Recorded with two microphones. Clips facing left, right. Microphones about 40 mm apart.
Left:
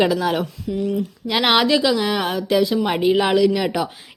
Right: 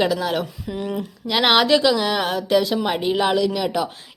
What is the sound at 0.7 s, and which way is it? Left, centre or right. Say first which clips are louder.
Speech: left 4 dB; right.